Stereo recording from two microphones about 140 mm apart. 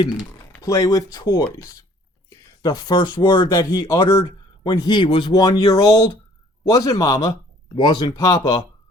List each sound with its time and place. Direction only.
0.6 s speech: 25° left (ahead or behind)
2.6 s speech: 25° left (ahead or behind)